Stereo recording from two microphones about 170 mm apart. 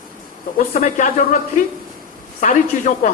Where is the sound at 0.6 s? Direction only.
50° left (ahead or behind).